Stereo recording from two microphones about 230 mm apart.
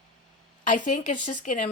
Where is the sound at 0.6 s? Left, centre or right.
Left.